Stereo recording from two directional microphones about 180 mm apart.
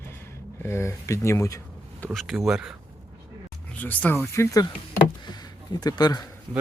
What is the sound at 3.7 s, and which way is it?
Speech, 10° left (ahead or behind).